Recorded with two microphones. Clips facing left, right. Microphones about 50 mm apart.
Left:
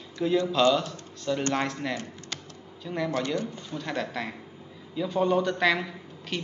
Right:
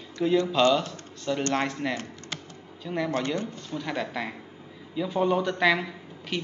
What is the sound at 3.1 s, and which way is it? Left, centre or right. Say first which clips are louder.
Speech: left 1 dB; right.